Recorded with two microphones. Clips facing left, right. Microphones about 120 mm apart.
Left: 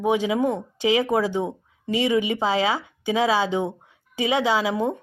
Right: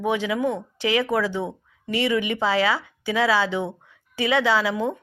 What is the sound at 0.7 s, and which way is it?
Speech, 15° left (ahead or behind).